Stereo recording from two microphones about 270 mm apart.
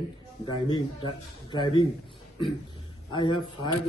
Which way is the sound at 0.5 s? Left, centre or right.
Centre.